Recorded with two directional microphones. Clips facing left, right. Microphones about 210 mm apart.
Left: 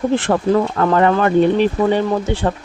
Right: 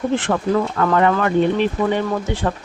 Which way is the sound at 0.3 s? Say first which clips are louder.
Left 3 dB; 35° left (ahead or behind).